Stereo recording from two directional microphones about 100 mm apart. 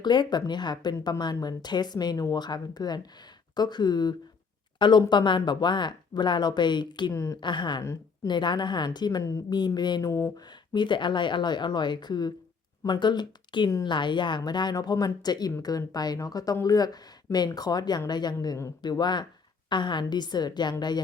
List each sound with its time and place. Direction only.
0.0 s speech: 50° left (ahead or behind)
7.1 s speech: 30° left (ahead or behind)
7.4 s speech: 50° left (ahead or behind)
7.8 s a woman's voice: 35° left (ahead or behind)
8.3 s speech: 50° left (ahead or behind)
10.1 s speech: 30° left (ahead or behind)
10.8 s speech: 50° left (ahead or behind)